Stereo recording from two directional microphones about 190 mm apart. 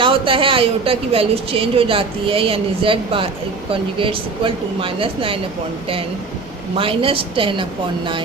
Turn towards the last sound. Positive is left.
turn(degrees=-25)  # may be behind; listen again after turning